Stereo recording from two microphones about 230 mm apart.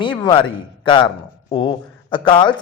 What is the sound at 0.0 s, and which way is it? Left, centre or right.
A man's voice, centre.